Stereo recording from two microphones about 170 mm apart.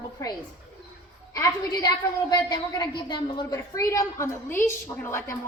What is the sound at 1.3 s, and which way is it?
A woman's voice, 20° left (ahead or behind).